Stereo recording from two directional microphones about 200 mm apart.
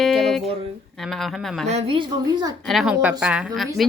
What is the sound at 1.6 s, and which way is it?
Speech, 30° right (ahead or behind).